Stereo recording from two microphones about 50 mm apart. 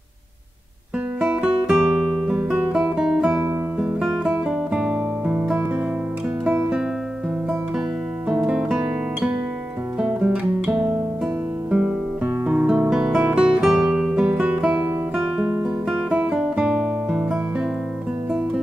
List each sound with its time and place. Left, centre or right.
1.2 s guitar: centre
2.3 s guitar: right
2.7 s music: centre
3.7 s guitar: right
4.5 s music: right
9.9 s music: centre
12.4 s guitar: right
13.6 s music: centre
13.8 s guitar: centre
14.2 s music: right
15.3 s guitar: centre
16.1 s music: right
16.6 s music: centre